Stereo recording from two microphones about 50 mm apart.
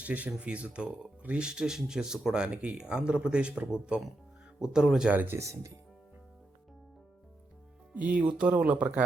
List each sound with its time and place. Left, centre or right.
0.0 s speech: right
4.6 s speech: centre
5.1 s speech: right
5.4 s speech: right
7.9 s speech: right